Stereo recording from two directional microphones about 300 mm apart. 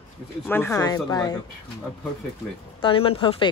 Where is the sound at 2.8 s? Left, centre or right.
Centre.